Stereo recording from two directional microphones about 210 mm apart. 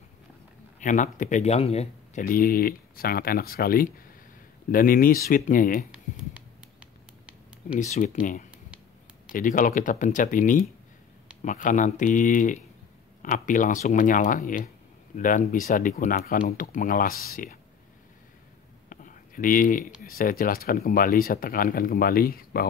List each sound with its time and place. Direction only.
0.7 s speech: 35° left (ahead or behind)
2.2 s speech: 45° left (ahead or behind)
5.9 s a sound: 5° right (ahead or behind)
7.7 s speech: 40° left (ahead or behind)
18.9 s a sound: 40° left (ahead or behind)
20.0 s speech: 40° left (ahead or behind)